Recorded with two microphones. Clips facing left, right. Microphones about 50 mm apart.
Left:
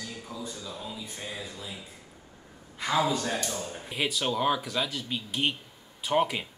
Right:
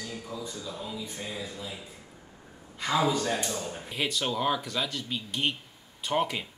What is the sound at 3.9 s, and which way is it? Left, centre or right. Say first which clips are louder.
Speech: left 1 dB; centre.